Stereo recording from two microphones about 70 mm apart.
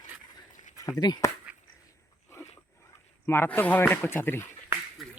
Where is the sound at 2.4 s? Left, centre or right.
Left.